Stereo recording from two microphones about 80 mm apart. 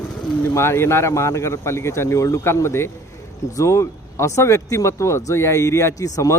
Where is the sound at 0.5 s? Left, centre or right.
Left.